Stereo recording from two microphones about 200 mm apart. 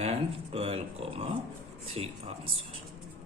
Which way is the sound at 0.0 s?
30° right (ahead or behind).